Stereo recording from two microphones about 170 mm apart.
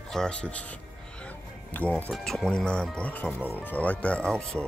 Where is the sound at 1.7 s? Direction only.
10° left (ahead or behind).